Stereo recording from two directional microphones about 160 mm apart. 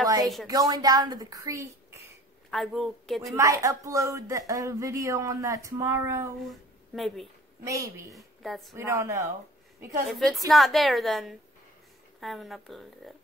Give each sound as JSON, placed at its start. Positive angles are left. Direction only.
{"t": 0.5, "sound": "speech", "side_deg": -25}
{"t": 2.5, "sound": "speech", "side_deg": 0}
{"t": 3.3, "sound": "speech", "side_deg": -20}
{"t": 6.4, "sound": "speech", "side_deg": 0}
{"t": 7.6, "sound": "speech", "side_deg": -20}
{"t": 8.4, "sound": "speech", "side_deg": 0}
{"t": 8.7, "sound": "speech", "side_deg": -20}
{"t": 10.0, "sound": "speech", "side_deg": 0}